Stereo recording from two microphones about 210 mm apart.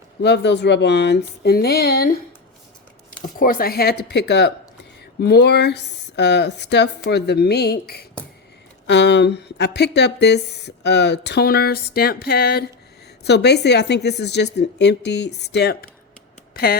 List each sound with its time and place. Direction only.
0.2 s speech: 55° left (ahead or behind)
3.2 s speech: 40° left (ahead or behind)